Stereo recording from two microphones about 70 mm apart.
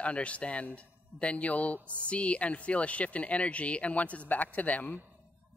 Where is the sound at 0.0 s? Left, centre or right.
Centre.